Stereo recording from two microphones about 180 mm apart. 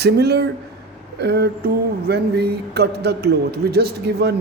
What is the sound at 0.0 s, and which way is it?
Speech, 65° right (ahead or behind).